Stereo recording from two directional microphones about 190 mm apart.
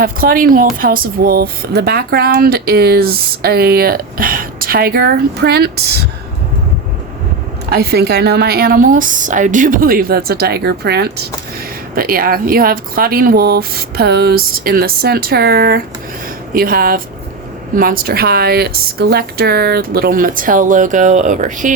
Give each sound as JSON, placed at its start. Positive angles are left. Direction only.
{"t": 0.0, "sound": "speech", "side_deg": -50}
{"t": 7.7, "sound": "speech", "side_deg": -55}